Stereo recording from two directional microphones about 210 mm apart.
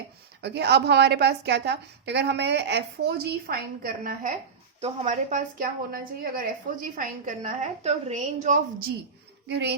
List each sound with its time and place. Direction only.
0.4 s a woman's voice: 55° right (ahead or behind); by 8.5 s 30° right (ahead or behind)
9.5 s a woman's voice: 55° right (ahead or behind)